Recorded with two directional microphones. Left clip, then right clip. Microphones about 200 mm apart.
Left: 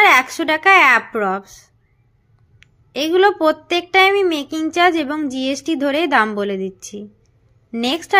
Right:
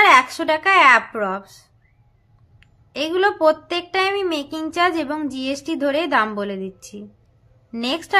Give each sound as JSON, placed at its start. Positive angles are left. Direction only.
{"t": 0.0, "sound": "a woman's voice", "side_deg": 20}